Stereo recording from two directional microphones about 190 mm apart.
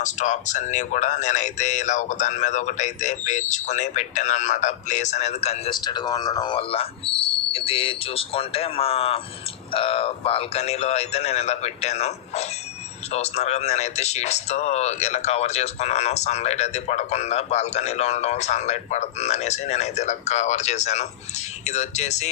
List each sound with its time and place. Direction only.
0.0 s speech: 40° left (ahead or behind)
5.8 s speech: 20° left (ahead or behind); by 22.3 s 35° left (ahead or behind)